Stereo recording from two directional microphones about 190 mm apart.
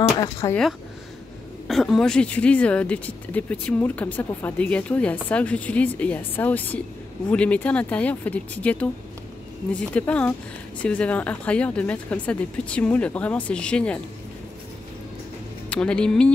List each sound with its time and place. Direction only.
0.2 s speech: 15° left (ahead or behind)
1.7 s speech: centre (ahead or behind)
15.7 s speech: 5° left (ahead or behind)